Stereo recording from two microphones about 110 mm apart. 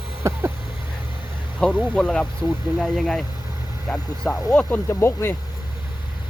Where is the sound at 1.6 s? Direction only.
10° left (ahead or behind).